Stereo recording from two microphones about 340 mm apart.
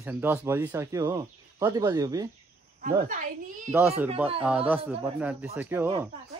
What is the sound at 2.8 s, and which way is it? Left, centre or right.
Speech, right.